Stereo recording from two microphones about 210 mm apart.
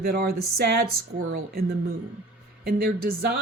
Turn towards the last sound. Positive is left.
turn(degrees=-45)  # may be behind; listen again after turning